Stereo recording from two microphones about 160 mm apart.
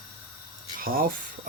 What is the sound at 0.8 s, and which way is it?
Speech, 65° right (ahead or behind).